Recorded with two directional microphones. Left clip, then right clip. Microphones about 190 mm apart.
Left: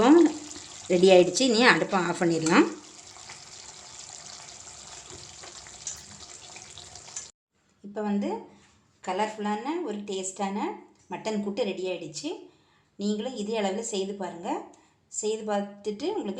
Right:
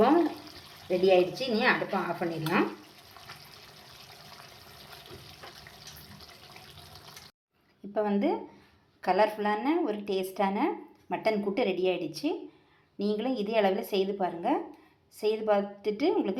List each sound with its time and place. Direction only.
0.9 s a woman's voice: 55° left (ahead or behind)
7.9 s speech: 20° right (ahead or behind)